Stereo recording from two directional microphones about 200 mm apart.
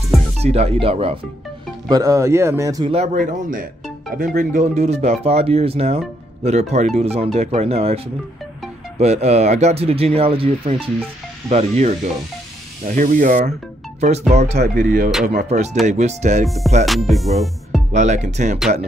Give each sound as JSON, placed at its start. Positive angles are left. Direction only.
{"t": 0.4, "sound": "speech", "side_deg": -30}
{"t": 2.9, "sound": "speech", "side_deg": -35}
{"t": 14.6, "sound": "speech", "side_deg": -45}
{"t": 16.4, "sound": "music", "side_deg": 0}
{"t": 17.9, "sound": "speech", "side_deg": -35}